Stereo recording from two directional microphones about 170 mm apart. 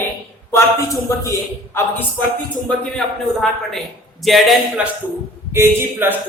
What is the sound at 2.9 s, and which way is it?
A woman's voice, 5° left (ahead or behind).